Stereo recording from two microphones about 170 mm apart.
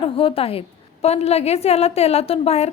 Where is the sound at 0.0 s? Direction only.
30° left (ahead or behind).